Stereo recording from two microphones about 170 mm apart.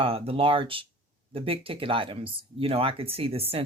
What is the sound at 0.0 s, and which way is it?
Speech, 35° right (ahead or behind).